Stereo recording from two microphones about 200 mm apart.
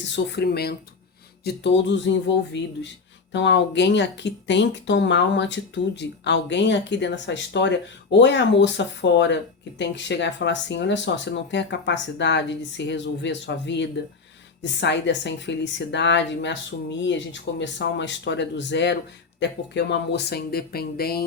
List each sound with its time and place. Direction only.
0.0 s speech: 60° left (ahead or behind)